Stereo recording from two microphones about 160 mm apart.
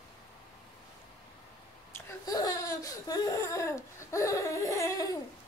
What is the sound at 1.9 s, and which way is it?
Speech, 25° left (ahead or behind).